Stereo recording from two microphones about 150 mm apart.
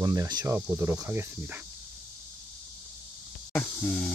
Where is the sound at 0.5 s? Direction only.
15° right (ahead or behind).